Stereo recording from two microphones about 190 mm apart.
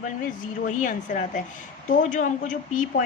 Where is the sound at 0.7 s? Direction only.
45° left (ahead or behind).